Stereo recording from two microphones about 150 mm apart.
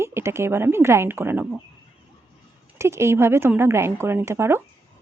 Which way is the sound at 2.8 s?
20° right (ahead or behind).